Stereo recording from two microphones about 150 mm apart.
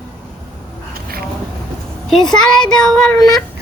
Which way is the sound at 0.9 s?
90° right.